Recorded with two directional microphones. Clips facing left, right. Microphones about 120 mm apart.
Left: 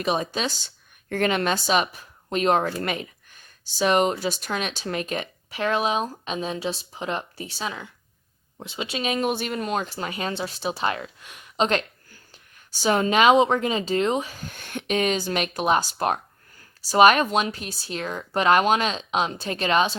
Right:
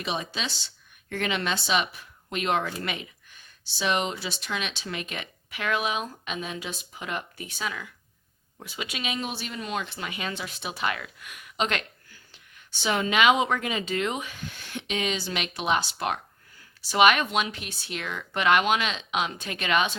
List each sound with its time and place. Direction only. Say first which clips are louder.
0.0 s a woman's voice: left 7 dB; 45° left (ahead or behind); by 9.0 s 30° left (ahead or behind)
9.0 s speech: left 9 dB; 50° left (ahead or behind); by 20.0 s 35° left (ahead or behind)